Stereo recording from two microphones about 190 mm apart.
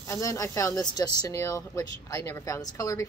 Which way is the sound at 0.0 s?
15° left (ahead or behind).